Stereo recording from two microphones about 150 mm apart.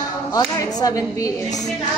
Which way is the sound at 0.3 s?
25° left (ahead or behind).